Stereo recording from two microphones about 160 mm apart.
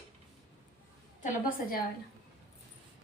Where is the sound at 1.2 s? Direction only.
65° left (ahead or behind).